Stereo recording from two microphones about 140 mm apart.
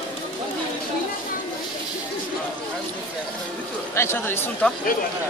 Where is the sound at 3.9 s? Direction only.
20° left (ahead or behind).